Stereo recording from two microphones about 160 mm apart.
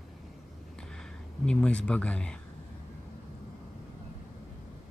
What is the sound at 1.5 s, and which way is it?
Speech, 5° left (ahead or behind).